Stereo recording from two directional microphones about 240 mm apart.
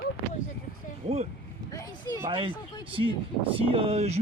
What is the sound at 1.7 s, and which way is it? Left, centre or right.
Speech, centre.